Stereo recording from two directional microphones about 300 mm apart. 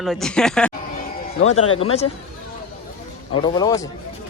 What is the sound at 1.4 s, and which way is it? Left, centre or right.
Speech, left.